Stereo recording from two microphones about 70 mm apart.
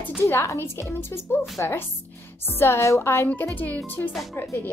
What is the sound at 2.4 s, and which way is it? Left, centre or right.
Speech, left.